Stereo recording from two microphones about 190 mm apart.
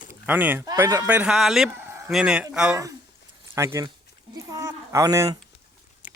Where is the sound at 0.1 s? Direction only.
10° right (ahead or behind).